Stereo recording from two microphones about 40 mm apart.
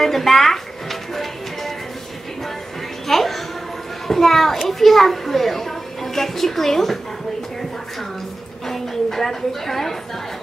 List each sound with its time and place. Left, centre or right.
0.0 s music: centre
3.1 s music: centre
4.1 s a woman's voice: centre
8.6 s a woman's voice: centre